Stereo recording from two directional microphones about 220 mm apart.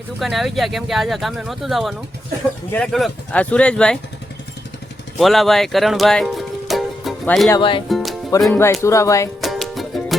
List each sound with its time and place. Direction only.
0.2 s speech: centre (ahead or behind)
5.1 s music: centre (ahead or behind)
7.5 s speech: 20° left (ahead or behind)
7.9 s music: centre (ahead or behind)
8.4 s speech: 5° left (ahead or behind)
9.4 s music: centre (ahead or behind)